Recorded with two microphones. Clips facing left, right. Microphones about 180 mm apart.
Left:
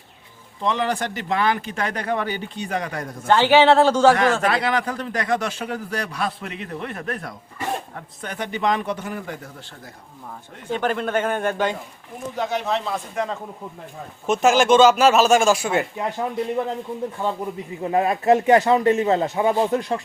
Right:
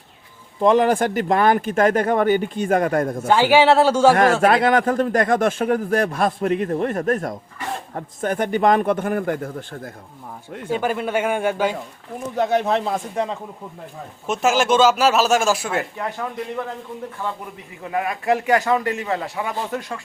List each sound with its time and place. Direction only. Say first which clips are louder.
0.6 s speech: right 7 dB; 45° right (ahead or behind)
3.2 s a man's voice: left 1 dB; 10° right (ahead or behind)
4.1 s speech: right 4 dB; 50° right (ahead or behind)
10.7 s a man's voice: right 1 dB; 10° right (ahead or behind)
12.4 s speech: right 5 dB; 55° right (ahead or behind)
14.3 s speech: left 2 dB; 5° right (ahead or behind)
16.0 s speech: left 2 dB; 20° left (ahead or behind)
17.8 s speech: left 4 dB; 30° left (ahead or behind)